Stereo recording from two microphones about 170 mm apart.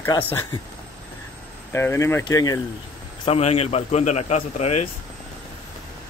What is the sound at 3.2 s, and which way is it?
A man's voice, 35° left (ahead or behind).